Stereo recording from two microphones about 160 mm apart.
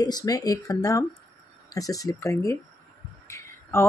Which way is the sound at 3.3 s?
15° left (ahead or behind).